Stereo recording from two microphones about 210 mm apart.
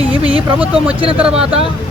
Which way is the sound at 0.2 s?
25° right (ahead or behind).